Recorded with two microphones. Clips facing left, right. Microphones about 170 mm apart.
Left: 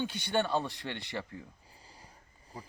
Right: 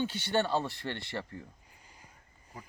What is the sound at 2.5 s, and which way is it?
Speech, 30° left (ahead or behind).